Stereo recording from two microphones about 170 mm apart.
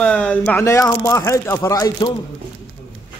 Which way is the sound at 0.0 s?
5° left (ahead or behind).